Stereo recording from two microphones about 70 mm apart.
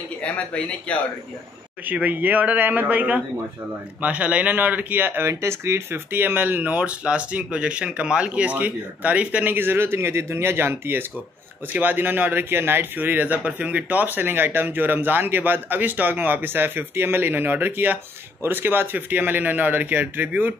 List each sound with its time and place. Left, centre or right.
0.2 s speech: centre
1.9 s speech: right
5.3 s speech: right